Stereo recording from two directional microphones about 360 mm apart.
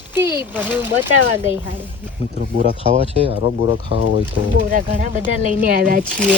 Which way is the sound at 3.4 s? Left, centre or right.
Left.